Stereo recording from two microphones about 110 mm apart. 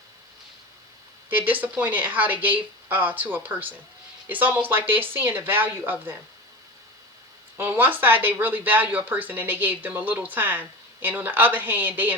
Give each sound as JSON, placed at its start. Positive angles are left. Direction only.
{"t": 1.3, "sound": "speech", "side_deg": -15}
{"t": 7.5, "sound": "speech", "side_deg": -20}